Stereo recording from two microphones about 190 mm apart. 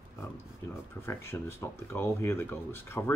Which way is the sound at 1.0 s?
15° left (ahead or behind).